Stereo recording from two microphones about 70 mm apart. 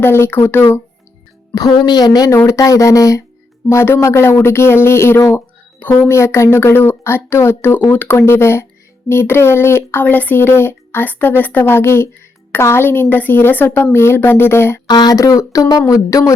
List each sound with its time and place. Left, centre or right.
0.0 s speech: left
1.5 s speech: left
2.5 s speech: left
3.7 s speech: left
10.0 s speech: left
13.8 s speech: left
14.8 s speech: left
15.2 s speech: left